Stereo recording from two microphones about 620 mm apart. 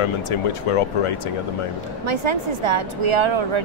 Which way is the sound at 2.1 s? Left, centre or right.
Right.